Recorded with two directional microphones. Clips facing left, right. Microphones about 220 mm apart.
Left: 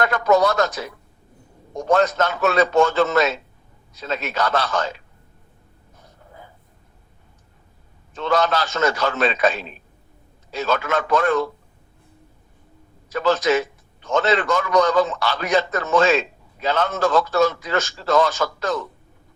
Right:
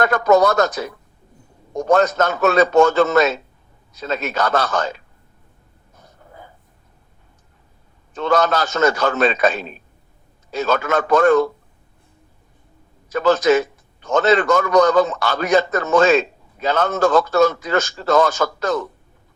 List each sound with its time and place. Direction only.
0.0 s a man's voice: 45° right (ahead or behind)
8.1 s a man's voice: 45° right (ahead or behind)
13.1 s a man's voice: 45° right (ahead or behind)